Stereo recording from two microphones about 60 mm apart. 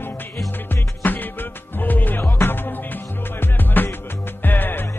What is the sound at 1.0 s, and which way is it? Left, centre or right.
Music, left.